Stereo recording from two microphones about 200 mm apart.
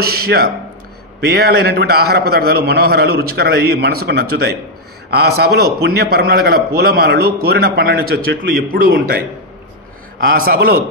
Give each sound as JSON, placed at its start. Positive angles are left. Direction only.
{"t": 0.0, "sound": "a man's voice", "side_deg": -50}
{"t": 10.2, "sound": "a man's voice", "side_deg": -45}